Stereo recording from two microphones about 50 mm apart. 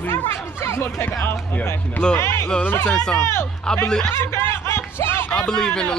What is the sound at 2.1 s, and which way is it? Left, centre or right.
Speech, left.